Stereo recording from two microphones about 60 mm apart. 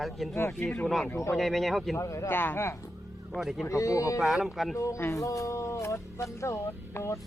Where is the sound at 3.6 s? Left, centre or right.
Left.